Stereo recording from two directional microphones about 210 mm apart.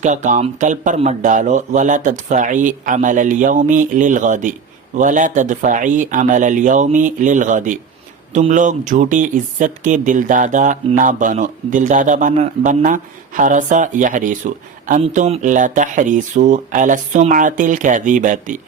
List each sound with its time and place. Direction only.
0.0 s speech: 35° right (ahead or behind)